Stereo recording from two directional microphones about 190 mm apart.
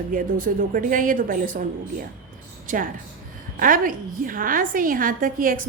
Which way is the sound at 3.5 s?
45° right (ahead or behind).